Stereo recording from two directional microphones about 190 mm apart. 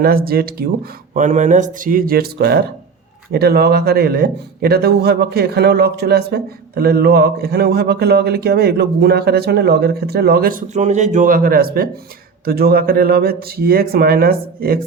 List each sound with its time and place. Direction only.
0.0 s speech: 50° right (ahead or behind)
1.1 s a man's voice: 40° right (ahead or behind)